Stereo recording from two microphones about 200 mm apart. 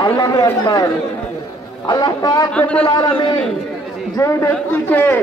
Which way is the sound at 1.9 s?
20° left (ahead or behind).